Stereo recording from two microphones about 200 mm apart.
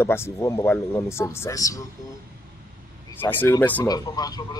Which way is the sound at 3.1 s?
10° left (ahead or behind).